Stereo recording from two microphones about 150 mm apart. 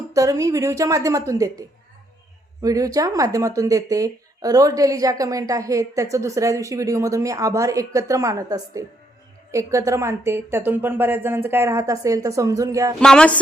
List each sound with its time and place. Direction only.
0.1 s speech: 20° right (ahead or behind)
13.0 s speech: 5° left (ahead or behind)